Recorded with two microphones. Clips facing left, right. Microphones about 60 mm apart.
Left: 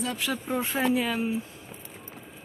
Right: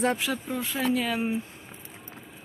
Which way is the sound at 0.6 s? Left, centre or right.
Left.